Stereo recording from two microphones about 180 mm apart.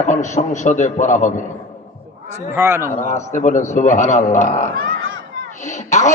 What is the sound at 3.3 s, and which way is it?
A man's voice, 45° left (ahead or behind).